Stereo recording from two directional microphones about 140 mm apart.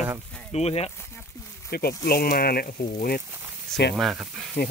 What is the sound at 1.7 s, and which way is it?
Speech, 90° left.